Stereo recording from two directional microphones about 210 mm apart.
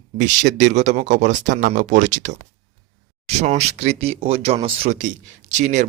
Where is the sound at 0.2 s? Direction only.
35° right (ahead or behind).